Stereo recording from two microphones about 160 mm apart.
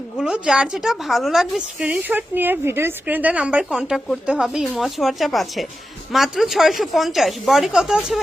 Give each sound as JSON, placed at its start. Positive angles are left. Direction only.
{"t": 0.2, "sound": "a woman's voice", "side_deg": -5}